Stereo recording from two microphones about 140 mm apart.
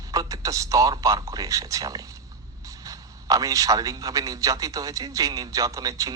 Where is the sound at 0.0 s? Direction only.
25° right (ahead or behind).